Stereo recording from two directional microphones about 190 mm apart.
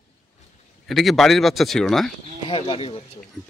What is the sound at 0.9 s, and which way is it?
Speech, centre (ahead or behind).